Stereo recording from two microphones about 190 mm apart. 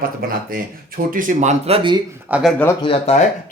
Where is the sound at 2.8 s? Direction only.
30° left (ahead or behind).